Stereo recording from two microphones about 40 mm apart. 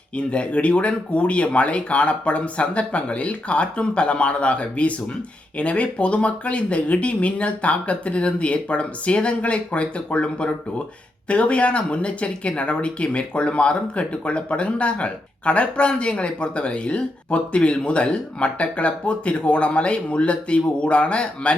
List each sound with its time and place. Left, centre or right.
0.2 s speech: left